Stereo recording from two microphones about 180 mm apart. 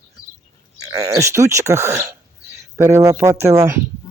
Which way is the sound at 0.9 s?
15° right (ahead or behind).